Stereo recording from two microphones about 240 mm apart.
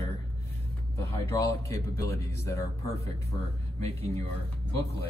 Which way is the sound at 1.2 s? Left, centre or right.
Centre.